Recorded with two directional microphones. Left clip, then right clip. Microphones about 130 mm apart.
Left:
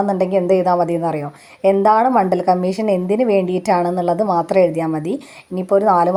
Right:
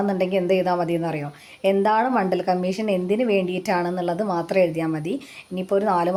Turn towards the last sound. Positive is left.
turn(degrees=30)  # may be behind; listen again after turning